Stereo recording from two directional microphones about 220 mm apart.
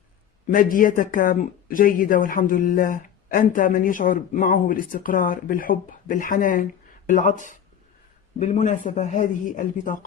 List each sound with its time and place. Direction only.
0.5 s speech: 40° left (ahead or behind)